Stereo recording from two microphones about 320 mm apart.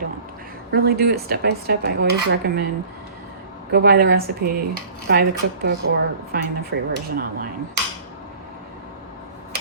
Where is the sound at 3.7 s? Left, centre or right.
Right.